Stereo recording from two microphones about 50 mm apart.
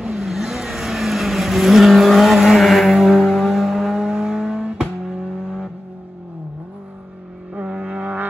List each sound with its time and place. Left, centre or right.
0.0 s vehicle: centre
7.5 s vehicle: right